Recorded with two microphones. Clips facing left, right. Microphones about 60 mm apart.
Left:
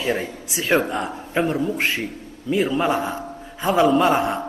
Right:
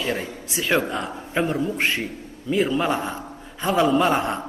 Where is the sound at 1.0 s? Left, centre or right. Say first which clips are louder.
Left 2 dB; centre.